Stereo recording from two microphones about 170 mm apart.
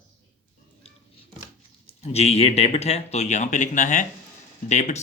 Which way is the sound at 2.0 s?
40° left (ahead or behind).